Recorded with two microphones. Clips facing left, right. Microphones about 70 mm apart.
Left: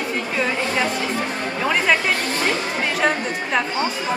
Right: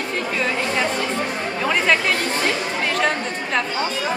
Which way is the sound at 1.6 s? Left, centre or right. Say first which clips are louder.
Even; centre.